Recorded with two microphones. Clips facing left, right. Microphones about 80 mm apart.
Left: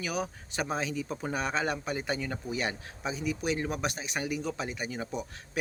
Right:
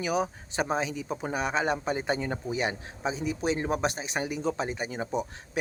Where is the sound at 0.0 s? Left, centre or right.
Right.